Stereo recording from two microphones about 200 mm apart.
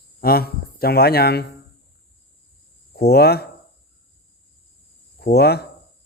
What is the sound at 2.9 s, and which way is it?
Speech, 55° left (ahead or behind).